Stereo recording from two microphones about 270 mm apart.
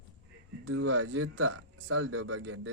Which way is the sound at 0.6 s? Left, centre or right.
Right.